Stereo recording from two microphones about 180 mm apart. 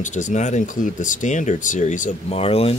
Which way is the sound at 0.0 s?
45° left (ahead or behind).